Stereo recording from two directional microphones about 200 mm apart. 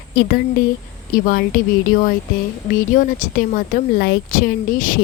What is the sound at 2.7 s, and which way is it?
Speech, 40° left (ahead or behind).